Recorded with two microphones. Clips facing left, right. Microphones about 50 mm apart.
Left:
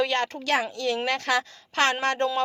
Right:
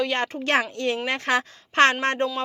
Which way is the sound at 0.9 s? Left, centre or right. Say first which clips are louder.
Even; centre.